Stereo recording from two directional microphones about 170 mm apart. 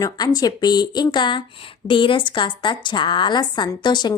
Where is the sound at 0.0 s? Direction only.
25° left (ahead or behind).